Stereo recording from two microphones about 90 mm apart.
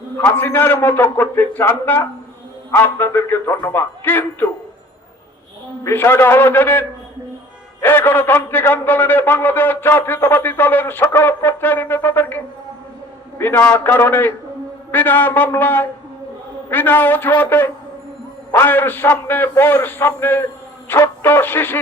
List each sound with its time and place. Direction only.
0.2 s a man's voice: 25° left (ahead or behind)
5.8 s a man's voice: 25° left (ahead or behind)
13.4 s a man's voice: 20° left (ahead or behind)